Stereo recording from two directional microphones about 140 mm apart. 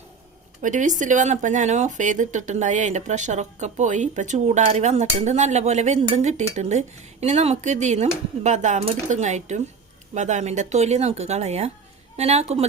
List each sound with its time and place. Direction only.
0.6 s speech: 65° right (ahead or behind)